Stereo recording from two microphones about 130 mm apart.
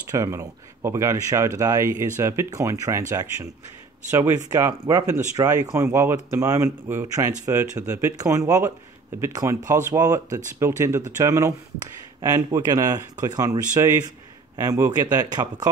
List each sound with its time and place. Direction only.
0.1 s speech: 25° right (ahead or behind)
4.5 s speech: 25° right (ahead or behind)